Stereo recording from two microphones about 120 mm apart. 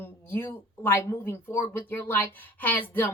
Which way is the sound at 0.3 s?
15° left (ahead or behind).